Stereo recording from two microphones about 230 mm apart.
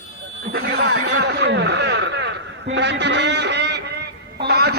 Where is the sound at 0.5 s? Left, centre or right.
Right.